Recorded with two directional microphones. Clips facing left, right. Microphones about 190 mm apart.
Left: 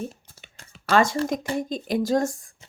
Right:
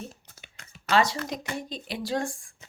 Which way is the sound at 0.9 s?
50° left (ahead or behind).